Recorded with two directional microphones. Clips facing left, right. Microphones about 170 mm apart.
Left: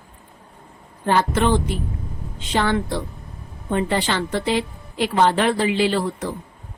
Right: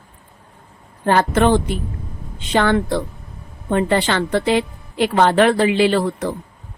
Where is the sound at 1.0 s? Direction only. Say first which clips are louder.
Right 4 dB; 55° right (ahead or behind).